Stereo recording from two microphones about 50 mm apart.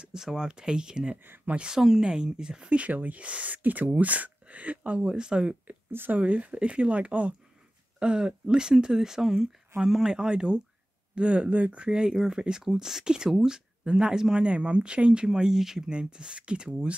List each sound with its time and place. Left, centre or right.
0.0 s speech: centre
1.1 s speech: right
1.5 s speech: centre
2.8 s speech: right
5.0 s speech: centre
5.7 s speech: right
6.1 s speech: right
11.9 s speech: centre